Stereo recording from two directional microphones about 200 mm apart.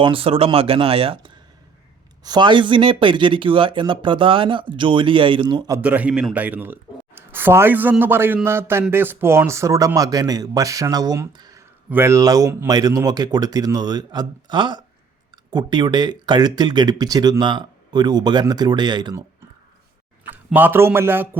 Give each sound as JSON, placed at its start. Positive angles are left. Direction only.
{"t": 0.0, "sound": "speech", "side_deg": -25}
{"t": 5.8, "sound": "a man's voice", "side_deg": -5}
{"t": 20.3, "sound": "a man's voice", "side_deg": -10}